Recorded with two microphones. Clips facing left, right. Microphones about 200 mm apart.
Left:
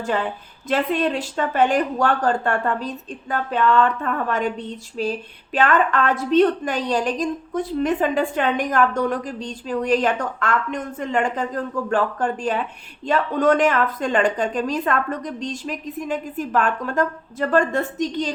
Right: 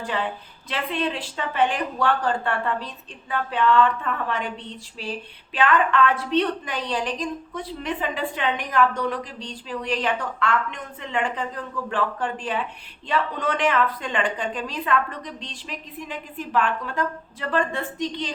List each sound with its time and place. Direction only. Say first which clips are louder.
0.7 s a woman's voice: left 6 dB; 45° left (ahead or behind)